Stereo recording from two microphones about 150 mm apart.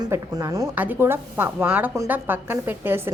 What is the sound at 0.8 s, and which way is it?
A woman's voice, 10° right (ahead or behind).